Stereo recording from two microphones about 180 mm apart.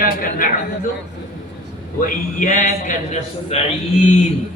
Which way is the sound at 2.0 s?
45° left (ahead or behind).